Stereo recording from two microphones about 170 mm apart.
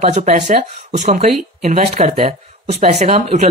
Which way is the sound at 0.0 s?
40° right (ahead or behind).